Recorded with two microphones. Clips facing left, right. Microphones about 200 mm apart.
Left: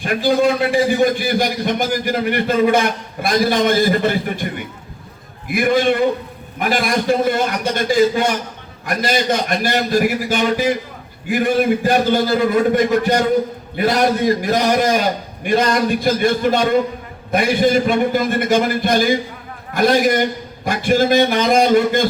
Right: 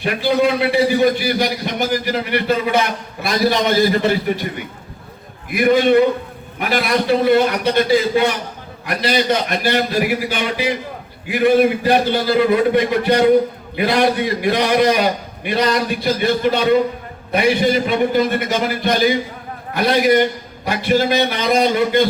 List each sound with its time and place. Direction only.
0.0 s a man's voice: 45° left (ahead or behind)
5.5 s a man's voice: 45° left (ahead or behind)